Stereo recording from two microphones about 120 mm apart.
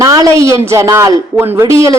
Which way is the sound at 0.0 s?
30° right (ahead or behind).